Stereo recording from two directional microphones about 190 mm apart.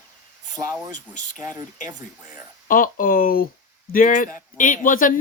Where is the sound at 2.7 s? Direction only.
45° left (ahead or behind).